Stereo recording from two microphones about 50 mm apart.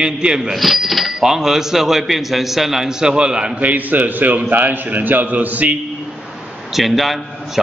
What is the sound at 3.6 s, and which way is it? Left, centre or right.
A man's voice, right.